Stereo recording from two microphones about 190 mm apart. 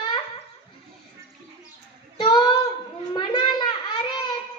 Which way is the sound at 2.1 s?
25° left (ahead or behind).